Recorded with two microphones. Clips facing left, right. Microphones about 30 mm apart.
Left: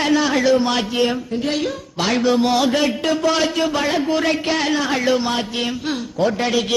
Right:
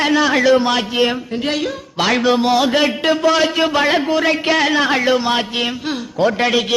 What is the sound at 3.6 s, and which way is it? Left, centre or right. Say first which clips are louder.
Speech: right 4 dB; right.